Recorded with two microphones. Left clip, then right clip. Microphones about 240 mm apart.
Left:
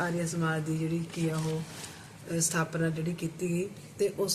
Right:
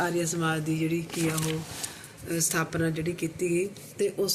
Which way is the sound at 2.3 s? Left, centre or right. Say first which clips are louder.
Right 2 dB; centre.